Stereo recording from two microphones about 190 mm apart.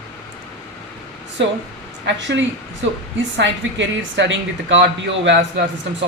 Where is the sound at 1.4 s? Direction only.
70° right (ahead or behind).